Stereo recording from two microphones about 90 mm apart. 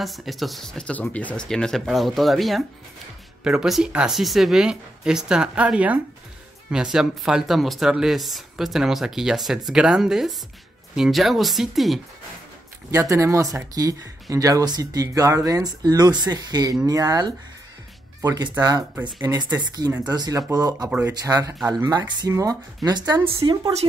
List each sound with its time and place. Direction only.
0.0 s speech: centre (ahead or behind); by 1.4 s 15° left (ahead or behind)
1.5 s a woman's voice: 5° left (ahead or behind)
12.9 s speech: 35° right (ahead or behind)
18.6 s speech: 50° right (ahead or behind)
22.8 s speech: 50° right (ahead or behind)